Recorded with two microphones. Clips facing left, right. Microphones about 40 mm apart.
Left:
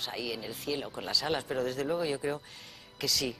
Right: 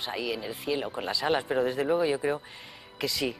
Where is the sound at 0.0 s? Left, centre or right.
Right.